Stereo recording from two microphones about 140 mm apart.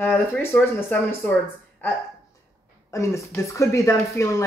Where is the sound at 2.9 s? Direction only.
20° left (ahead or behind).